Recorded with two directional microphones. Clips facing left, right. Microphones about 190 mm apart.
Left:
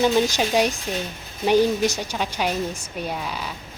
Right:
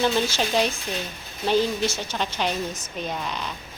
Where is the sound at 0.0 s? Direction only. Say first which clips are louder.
Left 4 dB; 15° left (ahead or behind).